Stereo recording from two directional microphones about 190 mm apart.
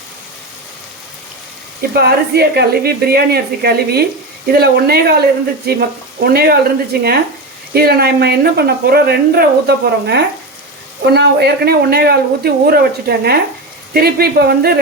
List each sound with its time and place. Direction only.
2.0 s speech: 55° right (ahead or behind)